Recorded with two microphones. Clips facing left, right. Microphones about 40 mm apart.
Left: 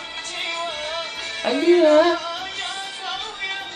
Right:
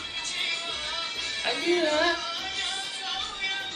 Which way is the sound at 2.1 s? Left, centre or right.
Left.